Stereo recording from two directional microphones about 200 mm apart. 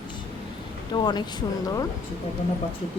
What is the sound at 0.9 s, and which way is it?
Speech, 20° left (ahead or behind).